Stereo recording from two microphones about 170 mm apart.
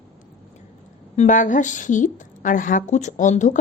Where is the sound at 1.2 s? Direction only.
50° left (ahead or behind).